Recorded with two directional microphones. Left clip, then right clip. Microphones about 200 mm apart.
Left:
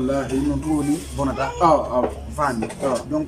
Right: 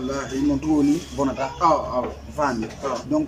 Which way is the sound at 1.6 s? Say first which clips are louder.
Left 2 dB; 20° left (ahead or behind).